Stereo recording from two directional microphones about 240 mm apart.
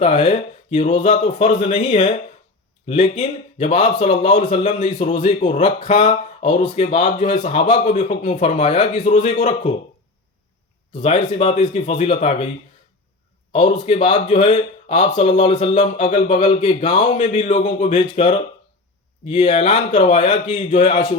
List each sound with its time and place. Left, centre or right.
0.0 s speech: left
11.0 s speech: left
13.5 s speech: left